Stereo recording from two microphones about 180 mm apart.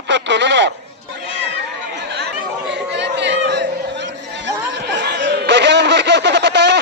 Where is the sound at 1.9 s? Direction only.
70° right (ahead or behind).